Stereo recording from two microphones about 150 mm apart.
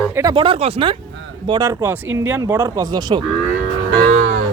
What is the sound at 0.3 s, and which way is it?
Speech, 35° right (ahead or behind).